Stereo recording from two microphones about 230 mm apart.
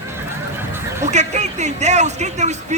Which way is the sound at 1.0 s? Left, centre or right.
Right.